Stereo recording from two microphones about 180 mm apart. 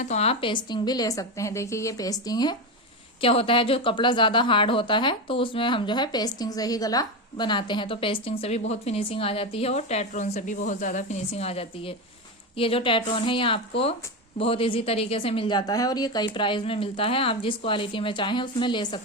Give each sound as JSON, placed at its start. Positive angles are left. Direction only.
{"t": 0.0, "sound": "speech", "side_deg": 35}